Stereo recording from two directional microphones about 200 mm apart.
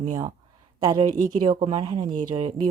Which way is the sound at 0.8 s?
20° right (ahead or behind).